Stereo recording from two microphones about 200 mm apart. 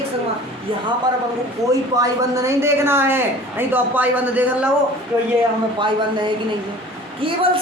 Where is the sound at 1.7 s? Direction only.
15° right (ahead or behind).